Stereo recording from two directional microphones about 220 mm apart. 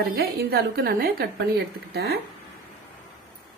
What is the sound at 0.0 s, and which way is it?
Speech, 45° right (ahead or behind).